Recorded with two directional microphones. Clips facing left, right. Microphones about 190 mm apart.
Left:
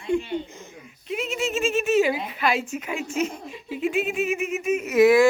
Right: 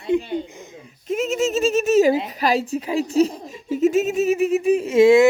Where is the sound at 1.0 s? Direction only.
45° right (ahead or behind).